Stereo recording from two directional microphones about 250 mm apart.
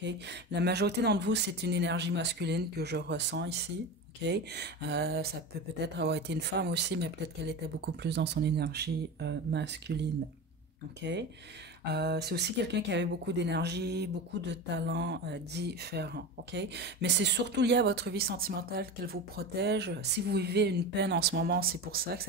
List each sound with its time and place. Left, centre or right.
0.0 s speech: right